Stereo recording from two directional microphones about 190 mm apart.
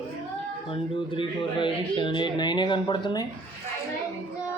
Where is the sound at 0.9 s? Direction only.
25° left (ahead or behind).